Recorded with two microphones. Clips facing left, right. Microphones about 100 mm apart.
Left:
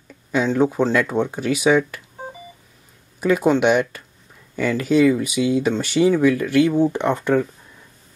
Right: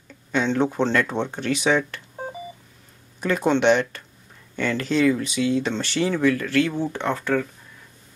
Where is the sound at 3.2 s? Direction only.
5° left (ahead or behind).